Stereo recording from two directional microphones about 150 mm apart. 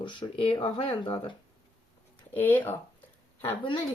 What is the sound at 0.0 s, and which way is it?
Speech, 35° left (ahead or behind).